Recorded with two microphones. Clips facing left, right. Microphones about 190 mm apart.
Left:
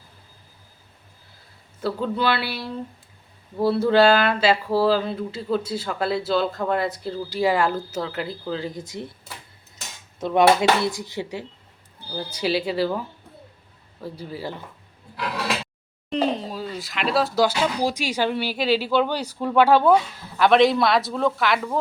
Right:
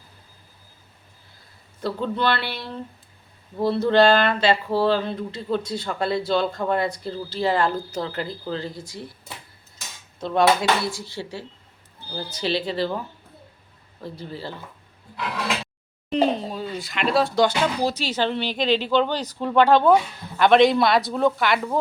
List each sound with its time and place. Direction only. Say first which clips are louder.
1.8 s speech: left 1 dB; 5° left (ahead or behind)
8.7 s speech: left 3 dB; 20° left (ahead or behind)
10.2 s speech: left 2 dB; 20° left (ahead or behind)
14.0 s speech: left 2 dB; 10° left (ahead or behind)
16.0 s speech: right 2 dB; centre (ahead or behind)